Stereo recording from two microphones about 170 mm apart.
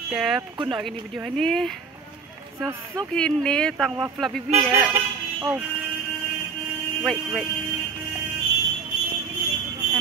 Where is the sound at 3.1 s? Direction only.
5° left (ahead or behind).